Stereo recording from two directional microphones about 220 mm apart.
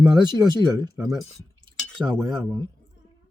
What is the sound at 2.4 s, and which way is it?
Speech, 15° left (ahead or behind).